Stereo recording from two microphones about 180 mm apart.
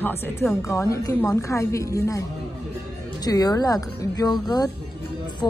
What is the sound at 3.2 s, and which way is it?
A woman's voice, 20° left (ahead or behind).